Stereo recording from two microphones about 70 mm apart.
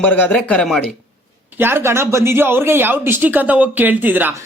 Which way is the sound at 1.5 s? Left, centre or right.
Right.